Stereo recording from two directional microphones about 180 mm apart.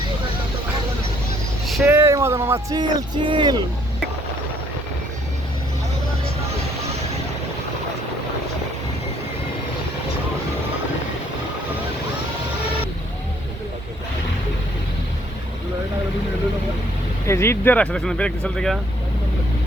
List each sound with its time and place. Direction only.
1.8 s speech: 15° right (ahead or behind)
17.2 s speech: 15° left (ahead or behind)